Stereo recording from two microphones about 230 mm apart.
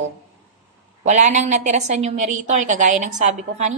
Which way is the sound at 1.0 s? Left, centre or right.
Right.